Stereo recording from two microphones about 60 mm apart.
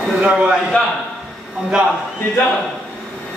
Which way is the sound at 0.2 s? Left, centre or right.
Centre.